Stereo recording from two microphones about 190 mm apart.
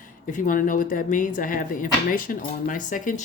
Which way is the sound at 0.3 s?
45° left (ahead or behind).